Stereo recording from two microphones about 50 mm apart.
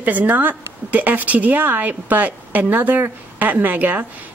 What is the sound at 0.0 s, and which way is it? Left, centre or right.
A woman's voice, right.